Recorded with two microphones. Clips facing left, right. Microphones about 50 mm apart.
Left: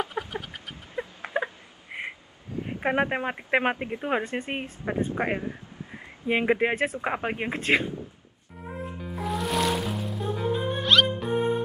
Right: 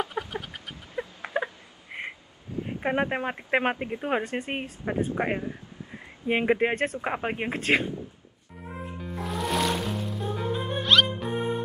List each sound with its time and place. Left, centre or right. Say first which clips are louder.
0.0 s chicken: even; centre
0.9 s a sound: even; left
1.9 s a sound: left 1 dB; centre
2.6 s speech: left 1 dB; centre
6.2 s speech: even; centre
9.0 s music: left 1 dB; centre